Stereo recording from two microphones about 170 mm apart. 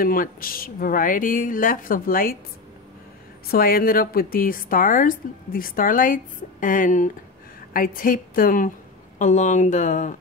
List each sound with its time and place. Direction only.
0.0 s a woman's voice: 55° left (ahead or behind)
3.4 s a woman's voice: 60° left (ahead or behind)